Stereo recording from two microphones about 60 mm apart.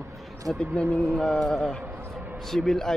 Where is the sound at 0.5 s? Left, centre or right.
Centre.